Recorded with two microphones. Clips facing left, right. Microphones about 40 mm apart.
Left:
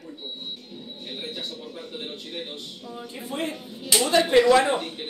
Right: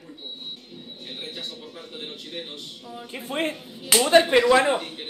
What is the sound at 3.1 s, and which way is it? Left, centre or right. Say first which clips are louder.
Speech: right 3 dB; right.